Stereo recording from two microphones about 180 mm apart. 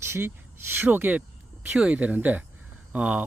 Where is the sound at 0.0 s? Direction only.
15° right (ahead or behind).